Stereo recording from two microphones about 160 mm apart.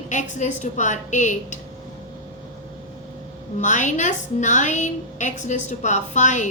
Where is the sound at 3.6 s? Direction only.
50° left (ahead or behind).